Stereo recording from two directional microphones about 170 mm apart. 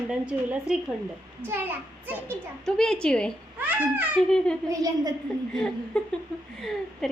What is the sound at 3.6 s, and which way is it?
Speech, 10° right (ahead or behind).